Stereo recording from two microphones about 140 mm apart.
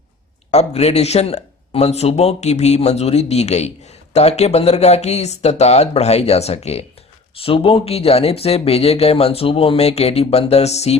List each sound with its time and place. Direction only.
0.5 s speech: 50° left (ahead or behind)